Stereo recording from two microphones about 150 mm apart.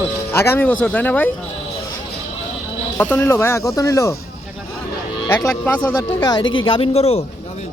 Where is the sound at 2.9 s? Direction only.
15° left (ahead or behind).